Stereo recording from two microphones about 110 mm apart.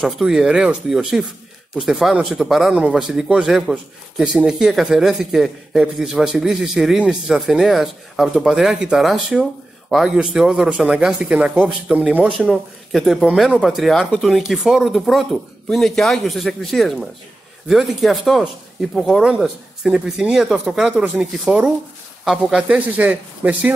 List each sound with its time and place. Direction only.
0.0 s a man's voice: 5° right (ahead or behind)